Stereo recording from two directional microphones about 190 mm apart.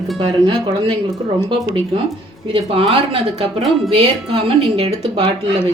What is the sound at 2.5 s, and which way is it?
Speech, 30° right (ahead or behind).